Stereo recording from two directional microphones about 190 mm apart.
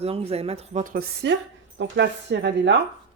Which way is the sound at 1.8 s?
65° right (ahead or behind).